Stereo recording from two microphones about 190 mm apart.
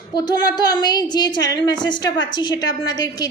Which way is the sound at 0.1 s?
20° left (ahead or behind).